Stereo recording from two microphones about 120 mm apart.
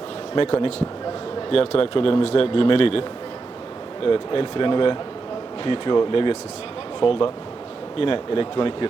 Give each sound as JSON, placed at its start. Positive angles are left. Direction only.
{"t": 0.3, "sound": "a man's voice", "side_deg": 50}